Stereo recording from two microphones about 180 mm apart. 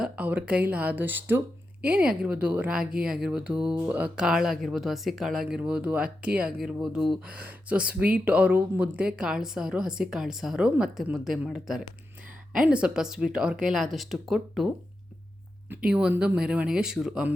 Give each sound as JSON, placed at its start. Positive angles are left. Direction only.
{"t": 0.0, "sound": "speech", "side_deg": -5}
{"t": 15.7, "sound": "speech", "side_deg": -5}